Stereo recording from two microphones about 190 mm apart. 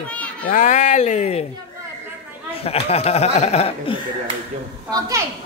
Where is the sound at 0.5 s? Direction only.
40° left (ahead or behind).